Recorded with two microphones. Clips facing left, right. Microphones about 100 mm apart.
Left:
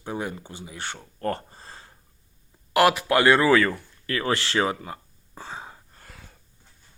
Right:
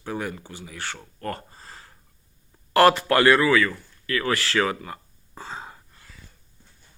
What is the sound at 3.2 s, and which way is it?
Speech, 25° left (ahead or behind).